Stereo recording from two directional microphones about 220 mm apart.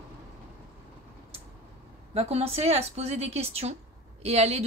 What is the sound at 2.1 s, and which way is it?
Speech, 25° right (ahead or behind).